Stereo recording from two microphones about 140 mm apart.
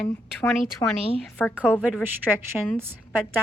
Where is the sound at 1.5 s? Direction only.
10° right (ahead or behind).